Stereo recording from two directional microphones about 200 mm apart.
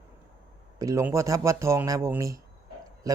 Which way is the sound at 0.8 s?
15° right (ahead or behind).